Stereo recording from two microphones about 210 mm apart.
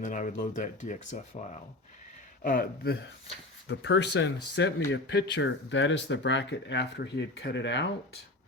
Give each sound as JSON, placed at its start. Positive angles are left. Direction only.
{"t": 0.0, "sound": "speech", "side_deg": 35}
{"t": 2.4, "sound": "speech", "side_deg": 40}